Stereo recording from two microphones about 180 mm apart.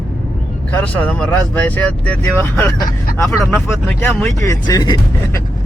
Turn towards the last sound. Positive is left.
turn(degrees=20)  # may be behind; listen again after turning